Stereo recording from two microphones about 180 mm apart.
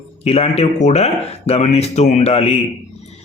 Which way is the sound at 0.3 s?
35° left (ahead or behind).